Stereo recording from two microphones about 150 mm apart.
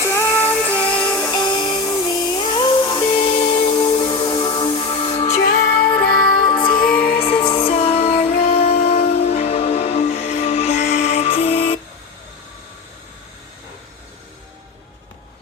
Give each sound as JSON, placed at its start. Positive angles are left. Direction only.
{"t": 0.1, "sound": "music", "side_deg": 15}
{"t": 1.1, "sound": "music", "side_deg": 20}
{"t": 1.5, "sound": "music", "side_deg": 30}
{"t": 5.8, "sound": "music", "side_deg": 10}
{"t": 6.5, "sound": "music", "side_deg": 30}
{"t": 6.9, "sound": "music", "side_deg": 85}
{"t": 7.3, "sound": "music", "side_deg": 35}